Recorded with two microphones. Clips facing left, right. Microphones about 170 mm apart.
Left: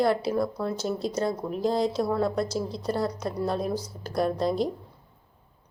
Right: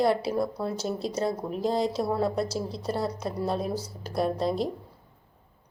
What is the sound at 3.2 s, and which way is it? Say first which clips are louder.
Speech: left 1 dB; 5° right (ahead or behind).